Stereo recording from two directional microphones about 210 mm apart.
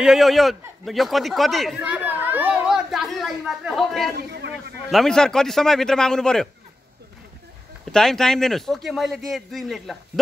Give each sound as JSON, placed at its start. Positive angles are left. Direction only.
{"t": 0.0, "sound": "a man's voice", "side_deg": 0}
{"t": 4.2, "sound": "a man's voice", "side_deg": -50}
{"t": 4.8, "sound": "a man's voice", "side_deg": 0}
{"t": 7.8, "sound": "a man's voice", "side_deg": 0}